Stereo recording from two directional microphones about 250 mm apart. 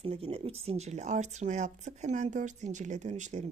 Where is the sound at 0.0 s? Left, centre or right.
Right.